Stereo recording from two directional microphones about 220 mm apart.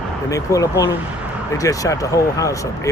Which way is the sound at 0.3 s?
15° left (ahead or behind).